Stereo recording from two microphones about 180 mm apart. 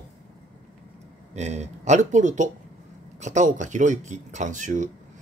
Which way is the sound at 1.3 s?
40° right (ahead or behind).